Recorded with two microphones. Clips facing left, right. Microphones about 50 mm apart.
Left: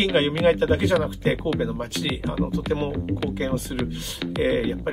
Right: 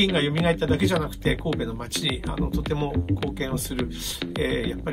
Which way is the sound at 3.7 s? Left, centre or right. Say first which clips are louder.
Left 1 dB; left.